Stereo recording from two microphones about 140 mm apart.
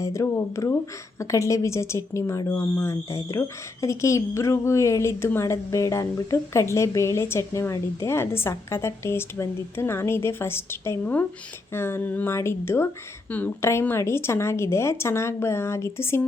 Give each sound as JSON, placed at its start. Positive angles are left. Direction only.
{"t": 0.0, "sound": "speech", "side_deg": 20}